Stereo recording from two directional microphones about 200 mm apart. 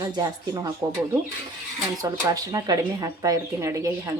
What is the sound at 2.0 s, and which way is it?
Speech, 15° right (ahead or behind).